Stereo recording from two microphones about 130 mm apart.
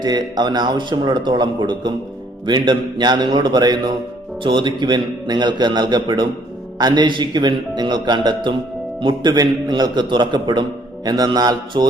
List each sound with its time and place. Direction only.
0.0 s a man's voice: 30° right (ahead or behind)